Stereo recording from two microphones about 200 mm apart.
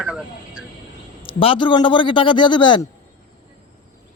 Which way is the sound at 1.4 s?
25° left (ahead or behind).